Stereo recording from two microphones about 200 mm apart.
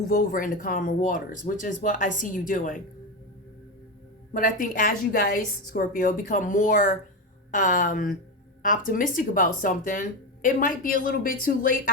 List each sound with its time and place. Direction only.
0.1 s speech: 45° left (ahead or behind)
4.3 s speech: 40° left (ahead or behind)